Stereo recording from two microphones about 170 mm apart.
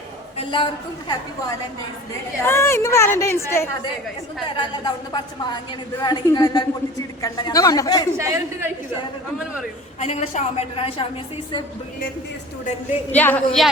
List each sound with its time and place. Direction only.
0.3 s a woman's voice: 30° left (ahead or behind)
2.4 s speech: 15° left (ahead or behind)
4.5 s a woman's voice: 25° left (ahead or behind)
8.2 s a man's voice: 20° right (ahead or behind)
10.0 s a woman's voice: 40° left (ahead or behind)
13.1 s speech: 10° left (ahead or behind)